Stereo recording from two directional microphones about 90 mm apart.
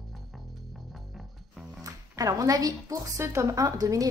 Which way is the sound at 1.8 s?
40° right (ahead or behind).